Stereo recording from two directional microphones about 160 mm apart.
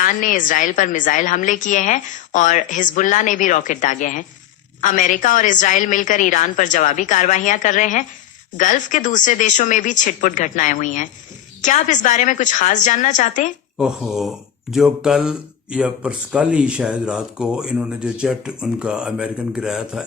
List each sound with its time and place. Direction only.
0.0 s a woman's voice: 55° left (ahead or behind)
13.7 s speech: centre (ahead or behind)